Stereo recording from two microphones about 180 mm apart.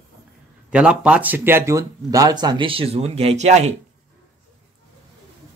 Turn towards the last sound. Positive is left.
turn(degrees=-40)  # may be behind; listen again after turning